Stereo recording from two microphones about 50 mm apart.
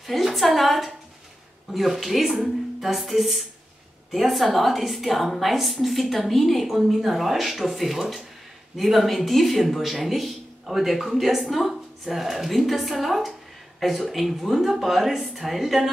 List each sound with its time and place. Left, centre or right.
0.0 s a woman's voice: centre